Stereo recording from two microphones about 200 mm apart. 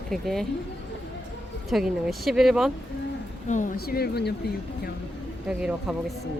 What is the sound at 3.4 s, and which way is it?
Speech, 40° left (ahead or behind).